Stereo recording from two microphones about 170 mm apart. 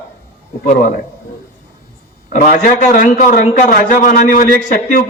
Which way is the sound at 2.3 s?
50° left (ahead or behind).